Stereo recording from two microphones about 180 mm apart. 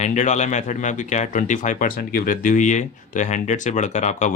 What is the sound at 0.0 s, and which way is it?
Speech, 40° left (ahead or behind).